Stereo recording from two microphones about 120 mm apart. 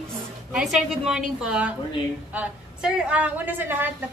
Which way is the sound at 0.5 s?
Centre (ahead or behind).